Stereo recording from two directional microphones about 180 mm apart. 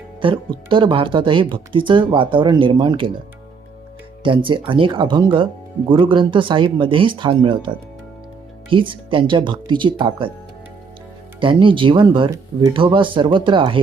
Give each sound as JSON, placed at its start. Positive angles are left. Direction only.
{"t": 0.2, "sound": "speech", "side_deg": -25}
{"t": 4.2, "sound": "speech", "side_deg": -25}
{"t": 8.7, "sound": "speech", "side_deg": -30}
{"t": 11.3, "sound": "speech", "side_deg": -30}